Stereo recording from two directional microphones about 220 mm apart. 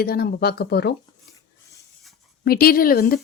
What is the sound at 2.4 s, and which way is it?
Speech, 40° left (ahead or behind).